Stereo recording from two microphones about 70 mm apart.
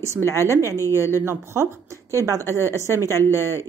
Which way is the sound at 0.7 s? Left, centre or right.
Left.